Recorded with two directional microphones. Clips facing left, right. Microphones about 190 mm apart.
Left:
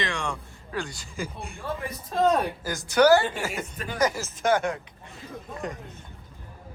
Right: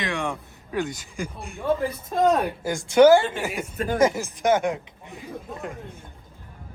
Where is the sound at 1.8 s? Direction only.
30° right (ahead or behind).